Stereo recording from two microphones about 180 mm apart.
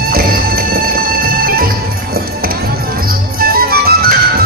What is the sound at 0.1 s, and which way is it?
Music, 55° right (ahead or behind).